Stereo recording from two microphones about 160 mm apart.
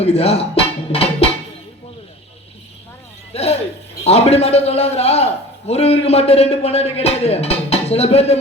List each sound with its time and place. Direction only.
0.0 s speech: 40° left (ahead or behind)
3.3 s a man's voice: 40° left (ahead or behind)